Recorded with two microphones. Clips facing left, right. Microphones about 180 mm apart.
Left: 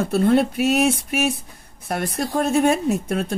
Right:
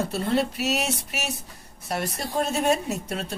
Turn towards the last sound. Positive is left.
turn(degrees=55)  # may be behind; listen again after turning